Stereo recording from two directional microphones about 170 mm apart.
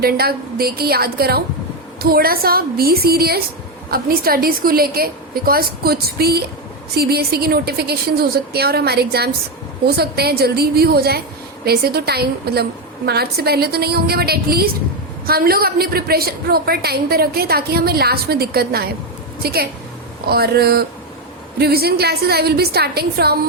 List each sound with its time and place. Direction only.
0.0 s a woman's voice: 65° right (ahead or behind)